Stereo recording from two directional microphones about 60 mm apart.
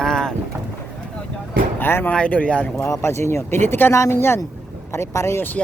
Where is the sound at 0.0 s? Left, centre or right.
Centre.